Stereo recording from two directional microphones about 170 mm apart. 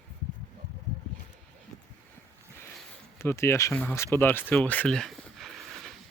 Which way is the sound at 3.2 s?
15° left (ahead or behind).